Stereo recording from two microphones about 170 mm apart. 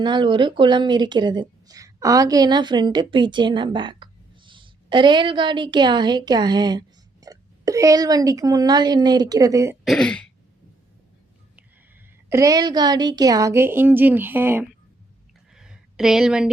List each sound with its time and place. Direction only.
0.0 s speech: 25° right (ahead or behind)
9.8 s speech: centre (ahead or behind)
12.3 s a woman's voice: 20° right (ahead or behind)
15.5 s a sound: 5° right (ahead or behind)